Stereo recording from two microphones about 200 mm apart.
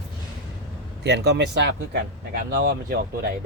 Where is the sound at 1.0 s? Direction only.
60° right (ahead or behind).